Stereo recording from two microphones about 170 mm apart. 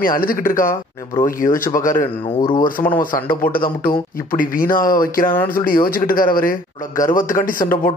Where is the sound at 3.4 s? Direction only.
60° left (ahead or behind).